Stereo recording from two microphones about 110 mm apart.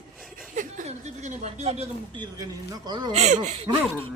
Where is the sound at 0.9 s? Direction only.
90° right; by 1.9 s 75° right (ahead or behind).